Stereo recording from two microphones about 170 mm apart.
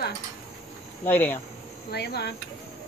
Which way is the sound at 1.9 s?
70° left (ahead or behind).